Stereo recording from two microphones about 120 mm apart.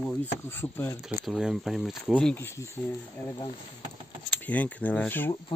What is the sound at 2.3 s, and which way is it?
Speech, 20° left (ahead or behind).